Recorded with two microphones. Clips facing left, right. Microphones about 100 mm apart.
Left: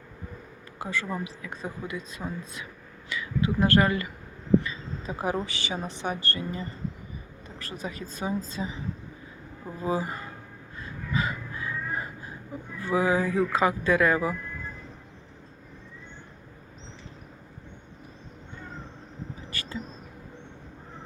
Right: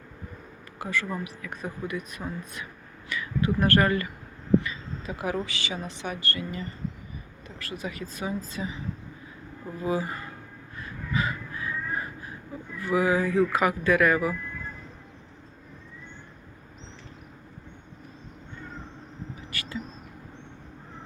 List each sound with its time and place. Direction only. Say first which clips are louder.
0.8 s speech: right 1 dB; 25° left (ahead or behind)
5.0 s a woman's voice: left 1 dB; 35° left (ahead or behind)
9.8 s speech: even; 25° left (ahead or behind)
10.8 s a sound: even; 25° left (ahead or behind)
12.8 s speech: right 1 dB; 25° left (ahead or behind)
19.5 s a sound: right 1 dB; 30° left (ahead or behind)